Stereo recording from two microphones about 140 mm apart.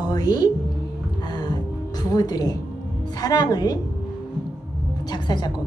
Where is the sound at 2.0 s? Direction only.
25° left (ahead or behind).